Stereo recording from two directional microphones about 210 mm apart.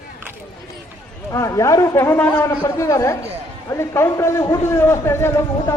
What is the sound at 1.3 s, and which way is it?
A man's voice, 15° left (ahead or behind).